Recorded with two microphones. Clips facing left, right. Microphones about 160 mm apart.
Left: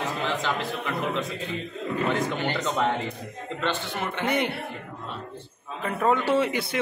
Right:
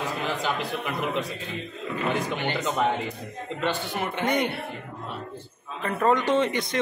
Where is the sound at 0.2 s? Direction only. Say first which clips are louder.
Even; 15° right (ahead or behind).